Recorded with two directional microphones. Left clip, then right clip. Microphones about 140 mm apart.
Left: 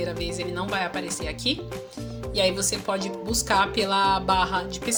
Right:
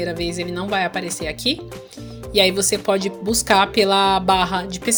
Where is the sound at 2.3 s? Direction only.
60° right (ahead or behind).